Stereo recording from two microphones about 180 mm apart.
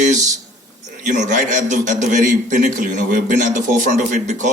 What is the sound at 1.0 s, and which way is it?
Speech, 45° right (ahead or behind).